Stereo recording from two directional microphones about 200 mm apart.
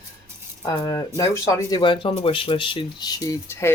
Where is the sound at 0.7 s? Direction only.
15° left (ahead or behind).